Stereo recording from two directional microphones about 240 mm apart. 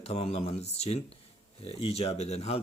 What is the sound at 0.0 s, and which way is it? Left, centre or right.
Speech, left.